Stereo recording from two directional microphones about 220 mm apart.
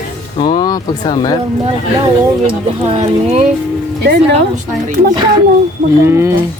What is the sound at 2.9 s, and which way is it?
Speech, 30° right (ahead or behind).